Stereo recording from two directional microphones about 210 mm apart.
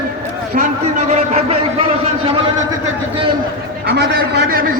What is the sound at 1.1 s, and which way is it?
Speech, 30° right (ahead or behind).